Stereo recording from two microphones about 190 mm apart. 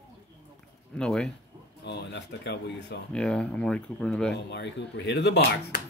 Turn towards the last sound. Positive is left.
turn(degrees=60)  # may be behind; listen again after turning